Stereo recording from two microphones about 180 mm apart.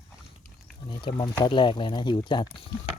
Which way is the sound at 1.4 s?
25° left (ahead or behind).